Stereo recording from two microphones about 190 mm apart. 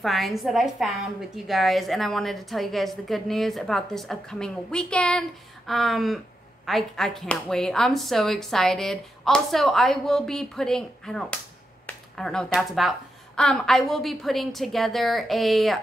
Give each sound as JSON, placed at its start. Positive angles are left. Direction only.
{"t": 0.0, "sound": "speech", "side_deg": 0}
{"t": 11.8, "sound": "a sound", "side_deg": 5}
{"t": 12.5, "sound": "speech", "side_deg": 0}